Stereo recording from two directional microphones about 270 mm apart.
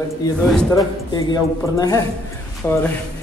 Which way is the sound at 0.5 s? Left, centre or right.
Centre.